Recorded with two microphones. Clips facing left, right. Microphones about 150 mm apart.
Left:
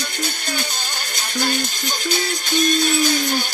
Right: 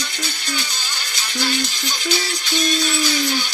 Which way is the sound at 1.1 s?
50° left (ahead or behind).